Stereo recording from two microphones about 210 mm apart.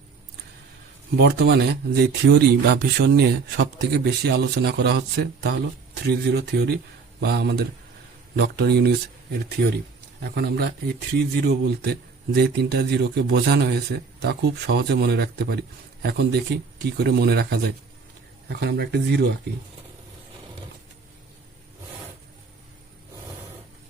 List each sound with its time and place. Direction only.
1.1 s speech: 50° right (ahead or behind)
10.2 s speech: 50° right (ahead or behind)